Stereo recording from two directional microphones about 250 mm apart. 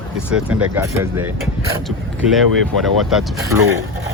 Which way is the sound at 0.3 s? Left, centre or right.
Centre.